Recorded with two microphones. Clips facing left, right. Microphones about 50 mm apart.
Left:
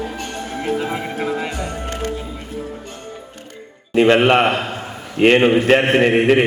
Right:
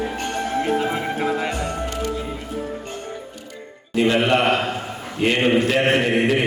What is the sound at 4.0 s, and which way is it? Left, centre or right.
Speech, left.